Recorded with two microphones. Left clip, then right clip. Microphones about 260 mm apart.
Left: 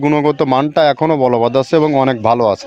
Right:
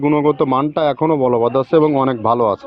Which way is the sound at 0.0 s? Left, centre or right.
Left.